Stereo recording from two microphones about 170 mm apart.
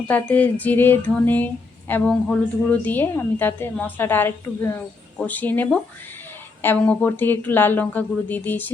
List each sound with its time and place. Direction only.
0.1 s a woman's voice: 10° left (ahead or behind)